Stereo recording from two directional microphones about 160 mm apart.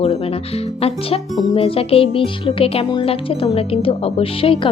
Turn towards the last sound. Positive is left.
turn(degrees=35)  # may be behind; listen again after turning